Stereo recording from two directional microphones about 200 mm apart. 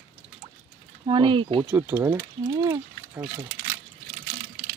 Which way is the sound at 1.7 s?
10° right (ahead or behind).